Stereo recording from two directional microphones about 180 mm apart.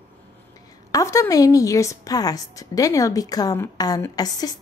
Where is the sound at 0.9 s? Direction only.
15° left (ahead or behind).